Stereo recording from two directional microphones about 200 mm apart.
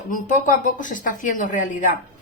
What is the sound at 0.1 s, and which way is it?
A woman's voice, 40° left (ahead or behind).